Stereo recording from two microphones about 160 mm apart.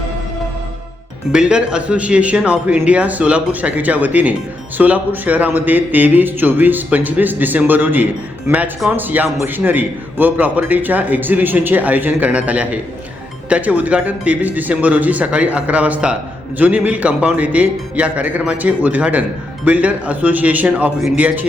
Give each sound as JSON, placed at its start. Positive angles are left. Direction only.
{"t": 1.3, "sound": "speech", "side_deg": -5}